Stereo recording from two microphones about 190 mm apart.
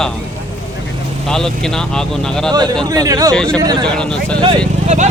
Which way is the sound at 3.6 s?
20° right (ahead or behind).